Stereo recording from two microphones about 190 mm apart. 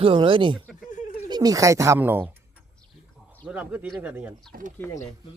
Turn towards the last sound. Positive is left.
turn(degrees=5)  # may be behind; listen again after turning